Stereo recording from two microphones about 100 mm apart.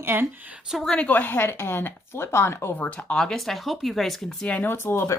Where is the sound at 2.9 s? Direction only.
10° left (ahead or behind).